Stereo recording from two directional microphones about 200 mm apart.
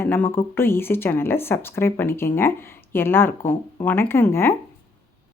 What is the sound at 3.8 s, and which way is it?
Speech, 10° left (ahead or behind).